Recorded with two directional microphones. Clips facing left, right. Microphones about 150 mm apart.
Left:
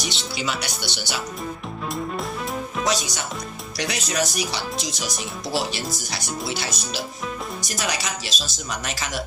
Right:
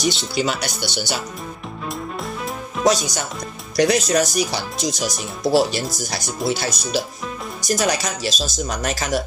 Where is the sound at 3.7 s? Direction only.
45° right (ahead or behind).